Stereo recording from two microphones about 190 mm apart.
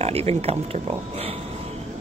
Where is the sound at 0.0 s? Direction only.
35° right (ahead or behind).